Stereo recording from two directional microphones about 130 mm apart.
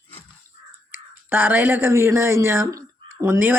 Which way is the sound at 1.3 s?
15° right (ahead or behind).